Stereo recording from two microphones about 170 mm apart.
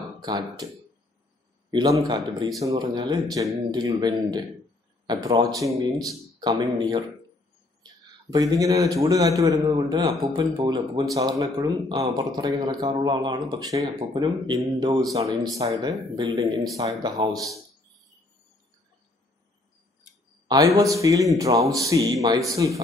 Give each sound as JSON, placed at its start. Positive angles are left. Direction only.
{"t": 0.2, "sound": "speech", "side_deg": -25}
{"t": 1.7, "sound": "a man's voice", "side_deg": -25}
{"t": 20.4, "sound": "speech", "side_deg": -20}